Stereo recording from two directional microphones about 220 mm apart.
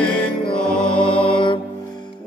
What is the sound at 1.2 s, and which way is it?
Mantra, 25° left (ahead or behind).